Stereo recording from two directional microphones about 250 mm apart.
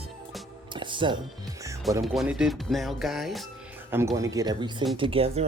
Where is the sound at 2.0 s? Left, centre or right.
Centre.